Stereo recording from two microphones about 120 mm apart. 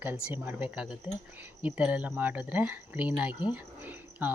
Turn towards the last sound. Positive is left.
turn(degrees=-15)  # may be behind; listen again after turning